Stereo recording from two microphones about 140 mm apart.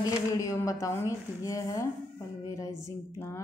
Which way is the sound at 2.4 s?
20° left (ahead or behind).